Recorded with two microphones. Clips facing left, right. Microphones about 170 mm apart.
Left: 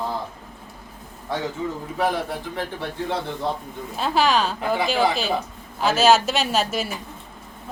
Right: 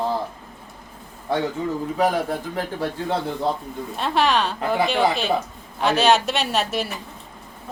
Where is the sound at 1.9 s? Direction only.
40° right (ahead or behind).